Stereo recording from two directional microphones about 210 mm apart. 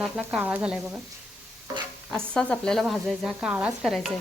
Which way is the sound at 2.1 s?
5° left (ahead or behind).